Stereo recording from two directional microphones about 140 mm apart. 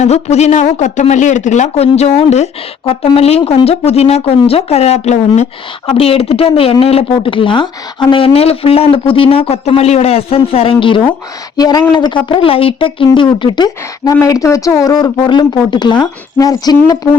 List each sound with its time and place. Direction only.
0.0 s a man's voice: 50° left (ahead or behind); by 17.1 s 25° left (ahead or behind)